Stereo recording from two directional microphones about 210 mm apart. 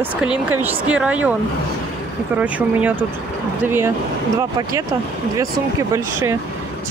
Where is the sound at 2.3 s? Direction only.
5° right (ahead or behind).